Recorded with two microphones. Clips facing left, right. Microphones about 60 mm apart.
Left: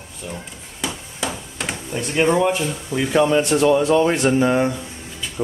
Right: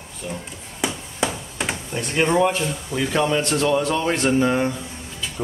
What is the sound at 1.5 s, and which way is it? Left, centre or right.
Speech, centre.